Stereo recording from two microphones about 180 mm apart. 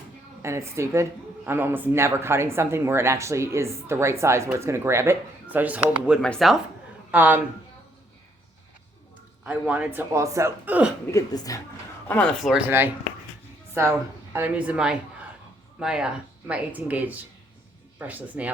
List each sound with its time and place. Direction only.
0.4 s speech: 15° right (ahead or behind)
6.2 s speech: centre (ahead or behind)
7.1 s speech: 10° right (ahead or behind)
9.4 s speech: 10° right (ahead or behind)
11.1 s a woman's voice: 20° left (ahead or behind)
12.0 s a woman's voice: 10° left (ahead or behind); by 18.5 s 10° right (ahead or behind)